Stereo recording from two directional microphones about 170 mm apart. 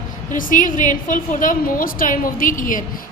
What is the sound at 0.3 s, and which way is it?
A woman's voice, 50° left (ahead or behind).